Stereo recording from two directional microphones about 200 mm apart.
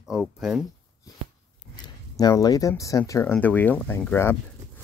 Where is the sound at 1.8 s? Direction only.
20° left (ahead or behind).